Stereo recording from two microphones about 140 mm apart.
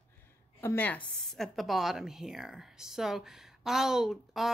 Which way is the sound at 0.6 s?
15° left (ahead or behind).